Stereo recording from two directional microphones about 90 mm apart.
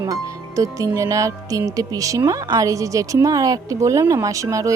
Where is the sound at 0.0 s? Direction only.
40° right (ahead or behind).